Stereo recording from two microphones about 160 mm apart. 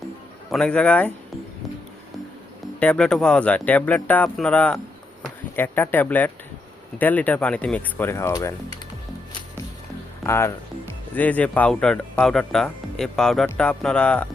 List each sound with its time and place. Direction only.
0.5 s speech: 5° left (ahead or behind)
2.8 s speech: 5° left (ahead or behind); by 8.8 s 20° left (ahead or behind)
10.2 s speech: 15° left (ahead or behind)